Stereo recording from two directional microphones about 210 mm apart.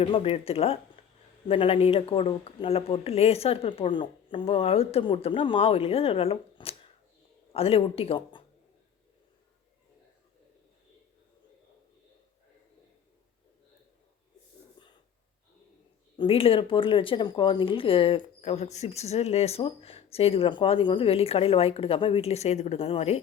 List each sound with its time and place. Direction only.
0.0 s speech: 25° left (ahead or behind)
16.1 s speech: 25° left (ahead or behind)